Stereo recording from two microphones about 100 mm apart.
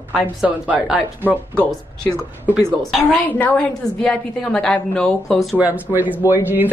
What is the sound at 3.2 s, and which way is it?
A woman's voice, 15° left (ahead or behind).